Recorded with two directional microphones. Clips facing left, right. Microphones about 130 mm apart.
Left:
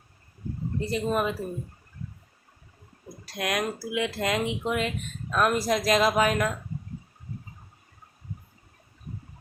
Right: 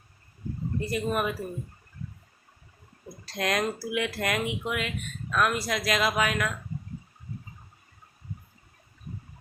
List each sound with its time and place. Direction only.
0.8 s speech: 25° left (ahead or behind)
3.2 s speech: 10° left (ahead or behind); by 6.6 s 35° left (ahead or behind)